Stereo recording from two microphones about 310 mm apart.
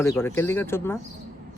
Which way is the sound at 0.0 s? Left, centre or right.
Centre.